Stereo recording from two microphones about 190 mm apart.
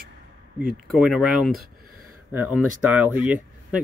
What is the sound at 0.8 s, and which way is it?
Speech, centre (ahead or behind).